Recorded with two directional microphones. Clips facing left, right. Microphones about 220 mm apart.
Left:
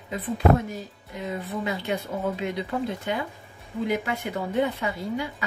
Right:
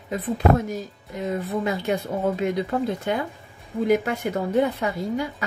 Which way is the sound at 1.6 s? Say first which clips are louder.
Right 4 dB; 45° right (ahead or behind).